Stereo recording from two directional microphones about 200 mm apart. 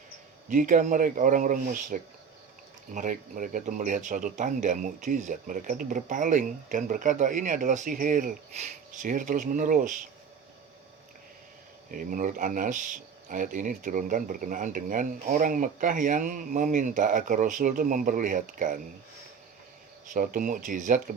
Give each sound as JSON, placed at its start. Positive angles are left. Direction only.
{"t": 0.5, "sound": "speech", "side_deg": -40}
{"t": 11.9, "sound": "speech", "side_deg": -40}
{"t": 20.1, "sound": "speech", "side_deg": -40}